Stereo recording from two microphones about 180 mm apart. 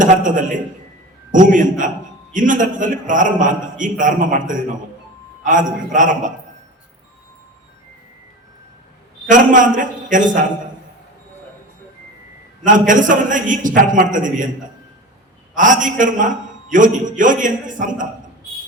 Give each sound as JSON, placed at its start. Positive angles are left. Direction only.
{"t": 0.0, "sound": "a man's voice", "side_deg": -45}
{"t": 9.3, "sound": "a man's voice", "side_deg": -45}
{"t": 12.6, "sound": "a man's voice", "side_deg": -45}
{"t": 15.5, "sound": "a man's voice", "side_deg": -45}